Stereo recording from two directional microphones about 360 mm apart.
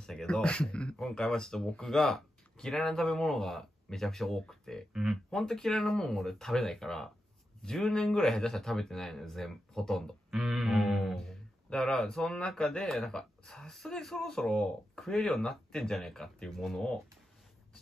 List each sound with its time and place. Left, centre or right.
0.0 s speech: centre